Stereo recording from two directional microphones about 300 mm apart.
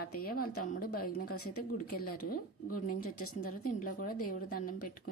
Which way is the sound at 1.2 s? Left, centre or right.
Left.